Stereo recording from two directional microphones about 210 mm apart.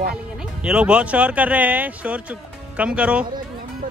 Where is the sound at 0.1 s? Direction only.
5° right (ahead or behind).